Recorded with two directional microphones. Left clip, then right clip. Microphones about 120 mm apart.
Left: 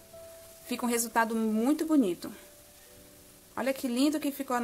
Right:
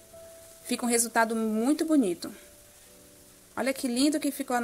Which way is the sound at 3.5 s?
15° right (ahead or behind).